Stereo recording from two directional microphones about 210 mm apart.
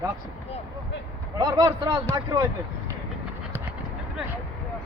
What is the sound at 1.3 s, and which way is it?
Speech, 20° right (ahead or behind).